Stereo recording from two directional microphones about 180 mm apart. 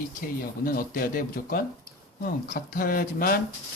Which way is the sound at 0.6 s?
55° left (ahead or behind).